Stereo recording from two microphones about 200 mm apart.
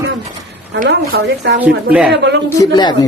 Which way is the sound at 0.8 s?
55° right (ahead or behind).